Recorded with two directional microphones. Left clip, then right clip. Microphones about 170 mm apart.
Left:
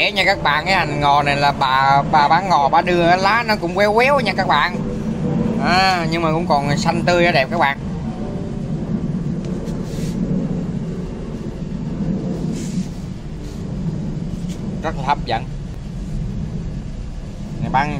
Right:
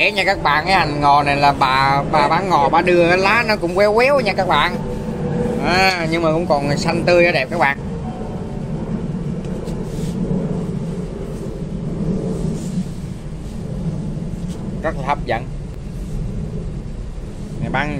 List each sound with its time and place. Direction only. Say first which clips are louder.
0.0 s speech: even; 10° left (ahead or behind)
14.8 s speech: left 1 dB; 20° left (ahead or behind)
17.6 s speech: left 3 dB; 15° left (ahead or behind)